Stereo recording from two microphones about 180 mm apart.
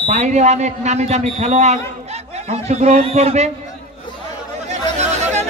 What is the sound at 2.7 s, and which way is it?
Speech, 40° right (ahead or behind).